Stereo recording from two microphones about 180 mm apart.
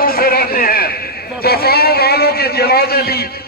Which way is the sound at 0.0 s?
55° left (ahead or behind).